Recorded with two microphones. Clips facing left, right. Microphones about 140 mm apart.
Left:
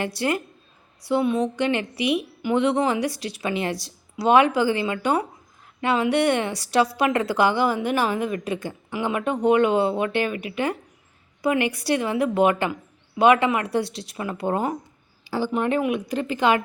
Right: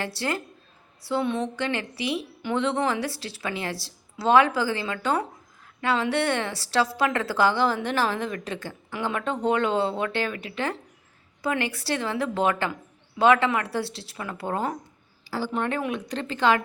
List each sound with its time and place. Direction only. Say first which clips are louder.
0.0 s a woman's voice: left 4 dB; 15° left (ahead or behind)